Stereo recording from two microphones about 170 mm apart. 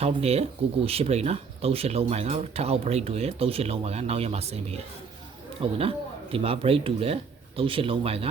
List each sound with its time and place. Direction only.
0.0 s speech: 35° right (ahead or behind)